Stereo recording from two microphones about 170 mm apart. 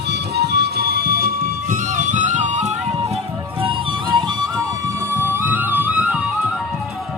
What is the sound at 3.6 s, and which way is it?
Music, 30° right (ahead or behind).